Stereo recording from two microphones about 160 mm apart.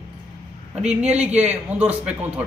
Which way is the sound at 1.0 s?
45° right (ahead or behind).